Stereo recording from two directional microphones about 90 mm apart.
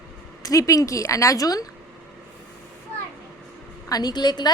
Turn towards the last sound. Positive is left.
turn(degrees=50)  # may be behind; listen again after turning